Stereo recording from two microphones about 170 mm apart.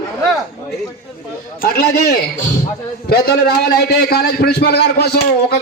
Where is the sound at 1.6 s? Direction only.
65° left (ahead or behind).